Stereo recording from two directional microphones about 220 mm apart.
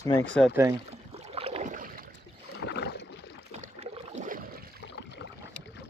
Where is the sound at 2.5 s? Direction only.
50° left (ahead or behind).